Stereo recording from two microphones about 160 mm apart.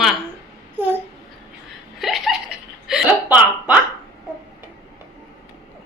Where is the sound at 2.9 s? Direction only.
5° right (ahead or behind).